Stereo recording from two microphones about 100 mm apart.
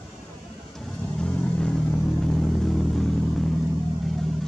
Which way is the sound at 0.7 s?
5° left (ahead or behind).